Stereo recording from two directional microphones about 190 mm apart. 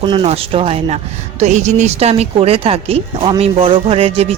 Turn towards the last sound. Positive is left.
turn(degrees=-30)  # may be behind; listen again after turning